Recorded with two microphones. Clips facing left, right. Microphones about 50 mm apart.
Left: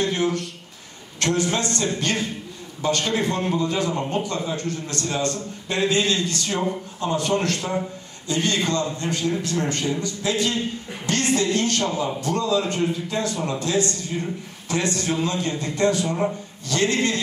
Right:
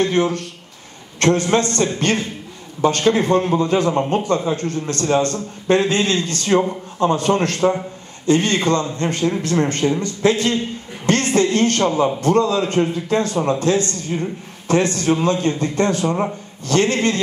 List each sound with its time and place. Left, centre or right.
0.0 s a man's voice: right